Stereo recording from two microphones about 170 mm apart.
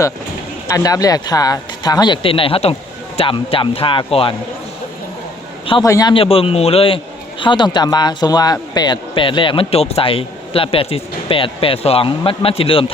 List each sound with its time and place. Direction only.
0.7 s a man's voice: 20° left (ahead or behind)
5.8 s a man's voice: 20° left (ahead or behind)